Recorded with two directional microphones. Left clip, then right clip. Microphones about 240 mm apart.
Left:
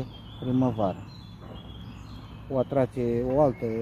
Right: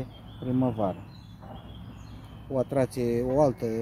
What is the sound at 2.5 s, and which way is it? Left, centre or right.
Speech, centre.